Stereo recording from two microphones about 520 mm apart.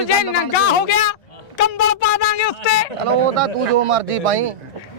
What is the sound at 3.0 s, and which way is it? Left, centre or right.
Speech, right.